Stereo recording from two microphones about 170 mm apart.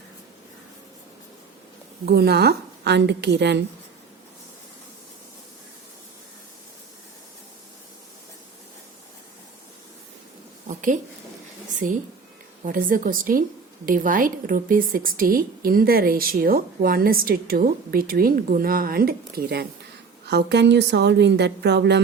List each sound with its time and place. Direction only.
2.0 s a woman's voice: 70° right (ahead or behind); by 3.6 s 85° right
10.7 s a sound: 50° right (ahead or behind)
11.7 s a woman's voice: 50° right (ahead or behind); by 19.6 s 65° right (ahead or behind)
20.2 s a woman's voice: 80° right